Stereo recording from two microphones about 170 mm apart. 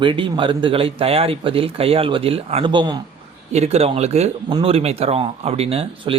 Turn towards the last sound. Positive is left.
turn(degrees=-35)  # may be behind; listen again after turning